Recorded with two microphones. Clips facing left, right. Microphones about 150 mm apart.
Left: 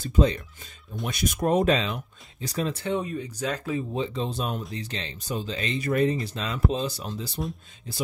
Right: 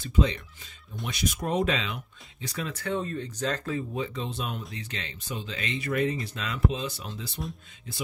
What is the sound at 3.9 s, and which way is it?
Speech, 30° left (ahead or behind).